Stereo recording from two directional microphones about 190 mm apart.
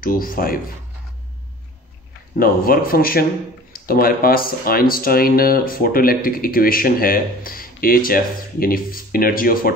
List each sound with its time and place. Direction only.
0.0 s speech: 50° left (ahead or behind)
2.3 s speech: 50° left (ahead or behind)